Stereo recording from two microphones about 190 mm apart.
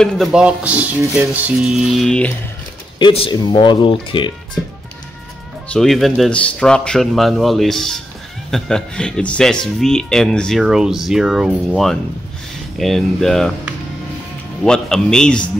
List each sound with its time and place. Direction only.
0.0 s speech: centre (ahead or behind)
3.0 s speech: 25° left (ahead or behind)
5.7 s speech: centre (ahead or behind)